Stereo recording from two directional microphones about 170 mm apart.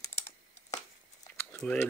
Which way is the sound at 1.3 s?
10° left (ahead or behind).